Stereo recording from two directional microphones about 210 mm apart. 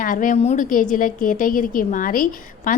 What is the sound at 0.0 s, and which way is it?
A woman's voice, 40° left (ahead or behind).